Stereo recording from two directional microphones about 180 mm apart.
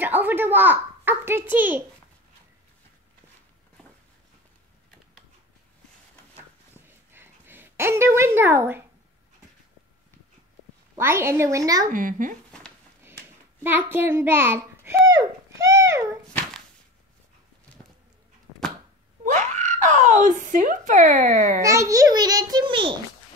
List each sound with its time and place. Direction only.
0.0 s a child's voice: 10° right (ahead or behind)
6.9 s a sound: 10° right (ahead or behind)
11.0 s a child's voice: 15° right (ahead or behind)
11.9 s speech: 50° right (ahead or behind)
13.6 s a child's voice: 10° right (ahead or behind)
19.2 s speech: 40° right (ahead or behind)
21.5 s a child's voice: 20° right (ahead or behind)